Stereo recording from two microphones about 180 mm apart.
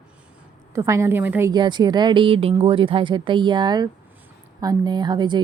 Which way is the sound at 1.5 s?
25° right (ahead or behind).